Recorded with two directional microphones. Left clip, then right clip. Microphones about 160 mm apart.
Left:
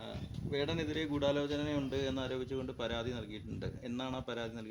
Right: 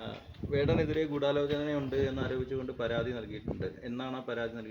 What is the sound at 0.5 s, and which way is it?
A man's voice, 45° left (ahead or behind).